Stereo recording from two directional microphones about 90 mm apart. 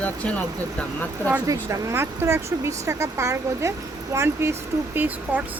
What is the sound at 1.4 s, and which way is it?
Speech, 35° right (ahead or behind).